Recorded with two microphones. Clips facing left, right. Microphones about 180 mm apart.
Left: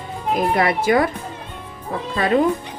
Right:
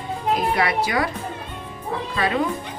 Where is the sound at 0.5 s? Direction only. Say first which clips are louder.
Left 5 dB; 50° left (ahead or behind).